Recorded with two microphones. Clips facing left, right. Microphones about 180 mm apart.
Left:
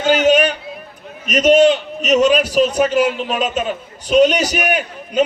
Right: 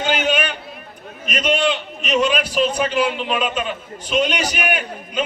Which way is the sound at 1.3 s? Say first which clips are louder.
Left 9 dB; 40° left (ahead or behind).